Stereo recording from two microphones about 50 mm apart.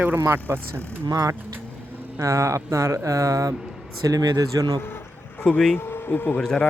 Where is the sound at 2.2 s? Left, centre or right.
Right.